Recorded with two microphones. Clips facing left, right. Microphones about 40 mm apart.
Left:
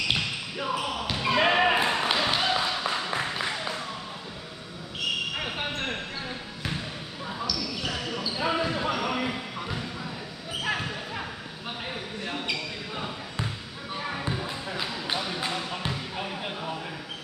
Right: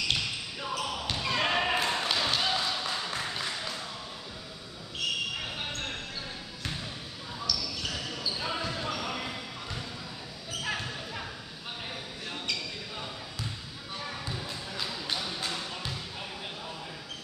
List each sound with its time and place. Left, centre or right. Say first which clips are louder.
0.1 s basketball bounce: left 3 dB; left
5.3 s basketball bounce: left 5 dB; left
7.7 s basketball bounce: left 4 dB; left